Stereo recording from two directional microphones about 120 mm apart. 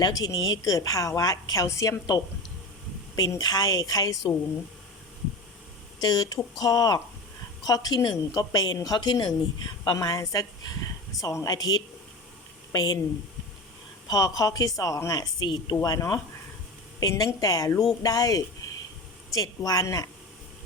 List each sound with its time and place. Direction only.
0.0 s a woman's voice: 30° left (ahead or behind)
6.0 s a woman's voice: 35° left (ahead or behind)
14.1 s a woman's voice: 30° left (ahead or behind)